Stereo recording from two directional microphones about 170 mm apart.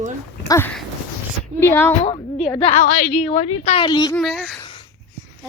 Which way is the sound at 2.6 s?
35° left (ahead or behind).